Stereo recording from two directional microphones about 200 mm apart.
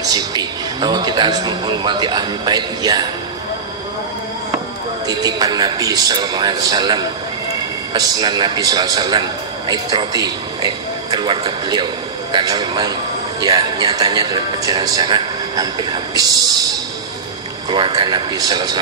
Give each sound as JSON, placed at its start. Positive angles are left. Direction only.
{"t": 0.0, "sound": "a man's voice", "side_deg": -20}
{"t": 5.0, "sound": "a man's voice", "side_deg": -20}